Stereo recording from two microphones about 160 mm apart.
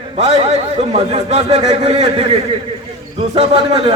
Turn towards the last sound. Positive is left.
turn(degrees=-40)  # may be behind; listen again after turning